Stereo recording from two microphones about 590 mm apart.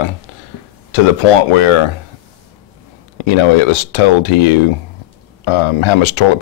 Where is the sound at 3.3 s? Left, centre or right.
Left.